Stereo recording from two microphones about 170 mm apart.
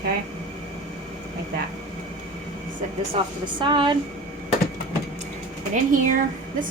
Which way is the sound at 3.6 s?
30° right (ahead or behind).